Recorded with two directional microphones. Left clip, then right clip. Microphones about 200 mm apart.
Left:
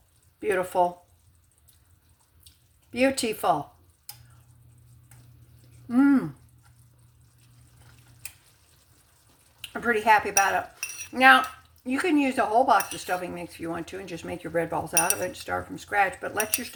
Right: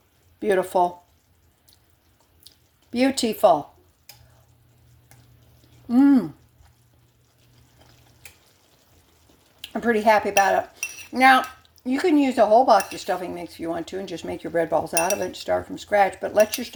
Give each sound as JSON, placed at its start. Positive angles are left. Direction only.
{"t": 0.3, "sound": "speech", "side_deg": -30}
{"t": 2.9, "sound": "speech", "side_deg": -30}
{"t": 5.9, "sound": "speech", "side_deg": -20}
{"t": 9.6, "sound": "speech", "side_deg": -25}